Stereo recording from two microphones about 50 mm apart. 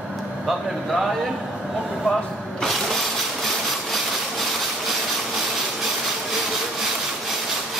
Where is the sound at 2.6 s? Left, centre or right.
Centre.